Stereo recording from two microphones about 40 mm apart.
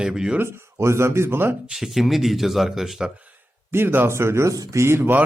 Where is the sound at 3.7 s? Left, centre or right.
Right.